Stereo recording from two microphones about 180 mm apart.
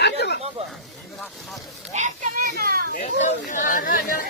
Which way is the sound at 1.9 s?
45° right (ahead or behind).